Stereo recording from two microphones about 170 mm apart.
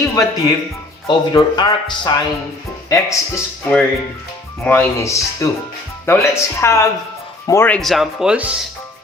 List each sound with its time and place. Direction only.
0.0 s speech: 20° left (ahead or behind)
4.6 s speech: 10° left (ahead or behind)
7.8 s speech: centre (ahead or behind)